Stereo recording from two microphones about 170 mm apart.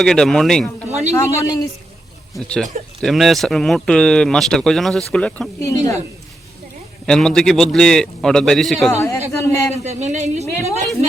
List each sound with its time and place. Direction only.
0.0 s speech: 5° left (ahead or behind)
1.1 s a man's voice: 20° left (ahead or behind)
2.3 s speech: 5° left (ahead or behind)
5.5 s speech: 20° left (ahead or behind)
7.0 s speech: centre (ahead or behind)
8.9 s a man's voice: 15° left (ahead or behind)
9.7 s speech: 40° right (ahead or behind)